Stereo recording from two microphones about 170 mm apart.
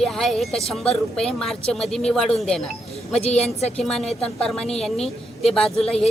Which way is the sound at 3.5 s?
40° left (ahead or behind).